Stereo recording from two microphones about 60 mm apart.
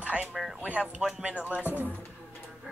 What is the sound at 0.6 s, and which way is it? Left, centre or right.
Speech, right.